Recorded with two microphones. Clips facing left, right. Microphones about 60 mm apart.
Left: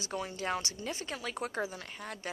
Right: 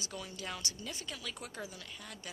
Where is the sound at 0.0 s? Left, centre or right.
Left.